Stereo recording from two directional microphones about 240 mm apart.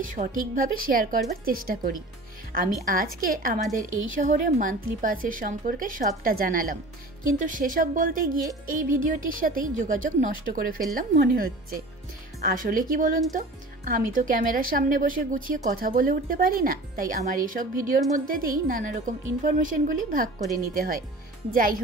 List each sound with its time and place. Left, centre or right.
0.0 s speech: right